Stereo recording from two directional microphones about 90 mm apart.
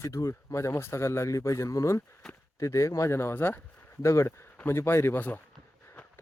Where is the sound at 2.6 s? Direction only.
35° left (ahead or behind).